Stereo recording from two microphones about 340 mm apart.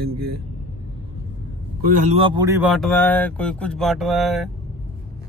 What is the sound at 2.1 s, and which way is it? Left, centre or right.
Speech, centre.